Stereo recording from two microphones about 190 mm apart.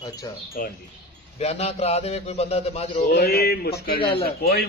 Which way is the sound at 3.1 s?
55° left (ahead or behind).